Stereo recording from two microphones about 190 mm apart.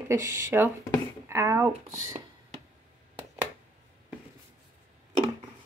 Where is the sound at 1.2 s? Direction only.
15° right (ahead or behind).